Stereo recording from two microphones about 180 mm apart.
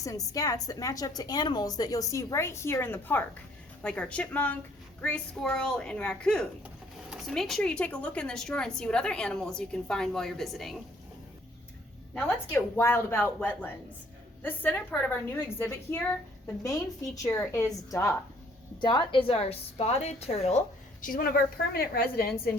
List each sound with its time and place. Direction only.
0.0 s a woman's voice: 20° left (ahead or behind); by 10.8 s centre (ahead or behind)
12.1 s a woman's voice: 15° left (ahead or behind)
17.2 s a woman's voice: 15° left (ahead or behind)
18.8 s a woman's voice: 25° left (ahead or behind)
21.0 s a woman's voice: 50° left (ahead or behind)